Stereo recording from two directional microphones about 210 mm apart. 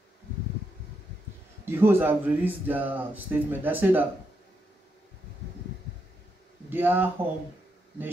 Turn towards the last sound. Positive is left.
turn(degrees=-10)  # may be behind; listen again after turning